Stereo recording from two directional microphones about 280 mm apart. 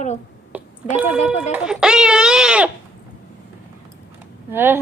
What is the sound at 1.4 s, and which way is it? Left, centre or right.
Speech, centre.